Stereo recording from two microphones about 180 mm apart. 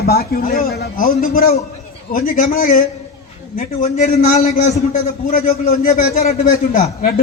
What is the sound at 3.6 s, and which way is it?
Speech, 35° left (ahead or behind).